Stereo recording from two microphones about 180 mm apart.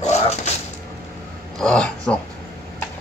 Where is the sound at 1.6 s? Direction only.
5° left (ahead or behind).